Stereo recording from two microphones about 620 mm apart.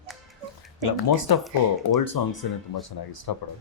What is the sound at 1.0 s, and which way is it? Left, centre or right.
Speech, left.